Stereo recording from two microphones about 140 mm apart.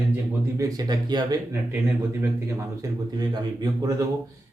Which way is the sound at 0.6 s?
25° right (ahead or behind).